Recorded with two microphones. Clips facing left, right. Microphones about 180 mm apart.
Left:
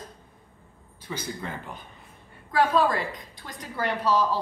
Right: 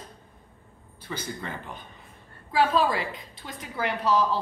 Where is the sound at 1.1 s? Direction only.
5° left (ahead or behind).